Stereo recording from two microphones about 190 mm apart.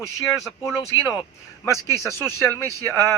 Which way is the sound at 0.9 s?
90° left.